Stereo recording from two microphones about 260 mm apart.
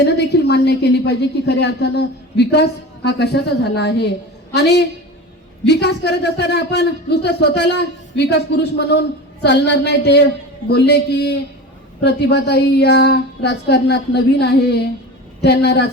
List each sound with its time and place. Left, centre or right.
0.0 s a man's voice: left